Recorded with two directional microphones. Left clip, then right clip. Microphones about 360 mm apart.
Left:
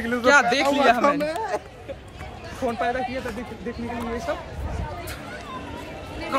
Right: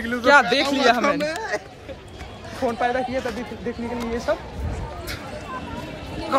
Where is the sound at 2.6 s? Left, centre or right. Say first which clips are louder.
Right 2 dB; centre.